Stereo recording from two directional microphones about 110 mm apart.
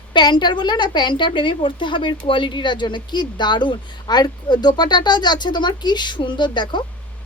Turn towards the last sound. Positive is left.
turn(degrees=45)  # may be behind; listen again after turning